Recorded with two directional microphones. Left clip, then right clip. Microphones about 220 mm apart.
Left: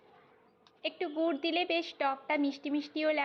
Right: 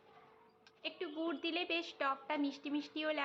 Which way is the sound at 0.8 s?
20° left (ahead or behind).